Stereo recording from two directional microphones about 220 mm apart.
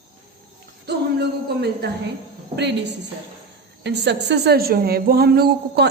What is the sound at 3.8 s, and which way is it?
A woman's voice, 50° right (ahead or behind).